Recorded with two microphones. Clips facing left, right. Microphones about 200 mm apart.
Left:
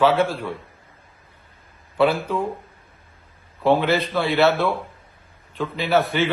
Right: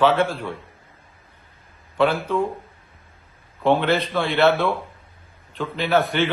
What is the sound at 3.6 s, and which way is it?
A man's voice, 5° left (ahead or behind).